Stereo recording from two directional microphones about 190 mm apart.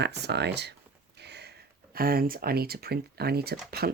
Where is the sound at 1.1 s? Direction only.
60° right (ahead or behind).